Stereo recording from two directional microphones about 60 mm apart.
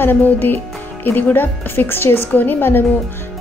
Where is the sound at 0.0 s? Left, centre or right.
Left.